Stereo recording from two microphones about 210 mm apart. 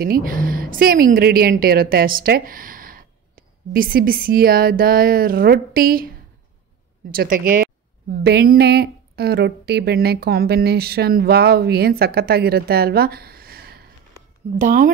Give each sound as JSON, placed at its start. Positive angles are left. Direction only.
{"t": 0.0, "sound": "a woman's voice", "side_deg": -45}
{"t": 7.2, "sound": "a woman's voice", "side_deg": -40}